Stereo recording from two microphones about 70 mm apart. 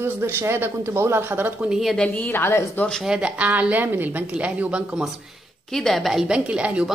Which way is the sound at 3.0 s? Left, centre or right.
Centre.